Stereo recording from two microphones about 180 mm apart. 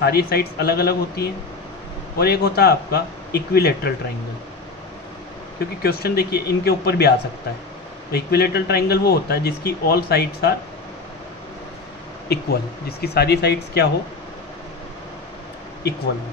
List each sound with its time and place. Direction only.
0.0 s a man's voice: 60° left (ahead or behind)
5.8 s a man's voice: 60° left (ahead or behind)
12.3 s a man's voice: 65° left (ahead or behind)